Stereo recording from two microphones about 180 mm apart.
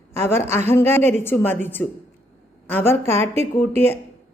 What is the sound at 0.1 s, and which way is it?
A woman's voice, 15° left (ahead or behind).